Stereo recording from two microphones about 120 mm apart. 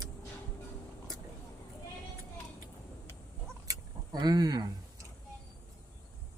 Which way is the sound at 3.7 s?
35° right (ahead or behind).